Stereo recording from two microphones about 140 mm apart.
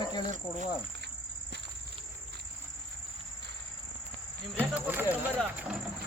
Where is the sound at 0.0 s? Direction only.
30° left (ahead or behind).